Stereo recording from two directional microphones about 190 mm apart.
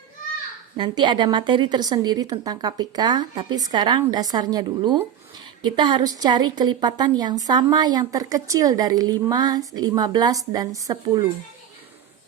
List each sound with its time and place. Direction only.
0.8 s a woman's voice: 25° right (ahead or behind)